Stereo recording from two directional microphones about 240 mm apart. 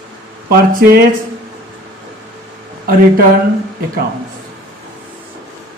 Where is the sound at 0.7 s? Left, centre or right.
Right.